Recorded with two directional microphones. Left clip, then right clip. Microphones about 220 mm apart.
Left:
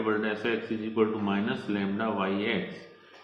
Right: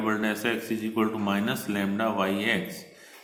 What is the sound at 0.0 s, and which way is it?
A man's voice, 55° right (ahead or behind).